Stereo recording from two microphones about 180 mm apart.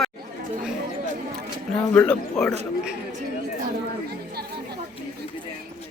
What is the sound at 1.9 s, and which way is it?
Speech, 5° left (ahead or behind).